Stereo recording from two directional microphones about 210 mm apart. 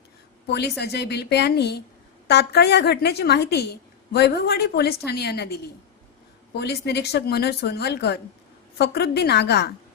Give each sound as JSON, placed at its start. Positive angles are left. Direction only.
{"t": 0.4, "sound": "a woman's voice", "side_deg": 50}
{"t": 6.6, "sound": "a woman's voice", "side_deg": 55}